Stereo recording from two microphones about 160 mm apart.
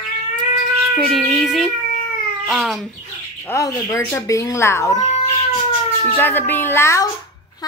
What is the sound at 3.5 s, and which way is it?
Speech, 20° left (ahead or behind).